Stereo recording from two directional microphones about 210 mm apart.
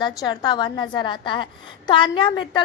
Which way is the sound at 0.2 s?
20° left (ahead or behind).